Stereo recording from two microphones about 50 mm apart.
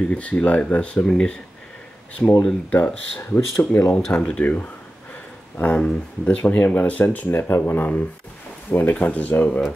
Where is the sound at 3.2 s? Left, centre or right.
Left.